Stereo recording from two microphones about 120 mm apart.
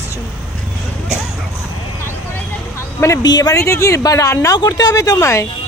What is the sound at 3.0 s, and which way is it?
Speech, 30° left (ahead or behind).